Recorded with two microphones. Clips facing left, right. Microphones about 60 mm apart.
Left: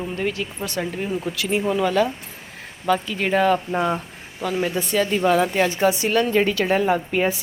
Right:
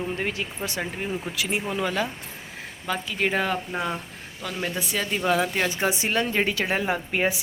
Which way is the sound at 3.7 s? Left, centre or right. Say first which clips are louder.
Left 6 dB; centre.